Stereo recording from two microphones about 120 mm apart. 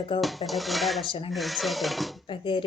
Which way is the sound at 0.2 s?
Centre (ahead or behind).